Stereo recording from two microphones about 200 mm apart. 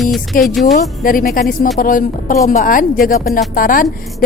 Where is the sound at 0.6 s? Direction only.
40° left (ahead or behind).